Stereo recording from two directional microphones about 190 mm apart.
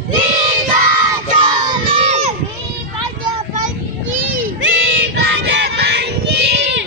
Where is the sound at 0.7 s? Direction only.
20° right (ahead or behind).